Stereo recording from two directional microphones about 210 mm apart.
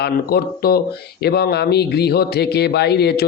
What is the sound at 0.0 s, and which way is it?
A man's voice, 50° left (ahead or behind).